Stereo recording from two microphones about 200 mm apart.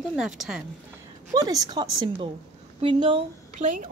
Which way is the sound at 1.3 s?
20° right (ahead or behind).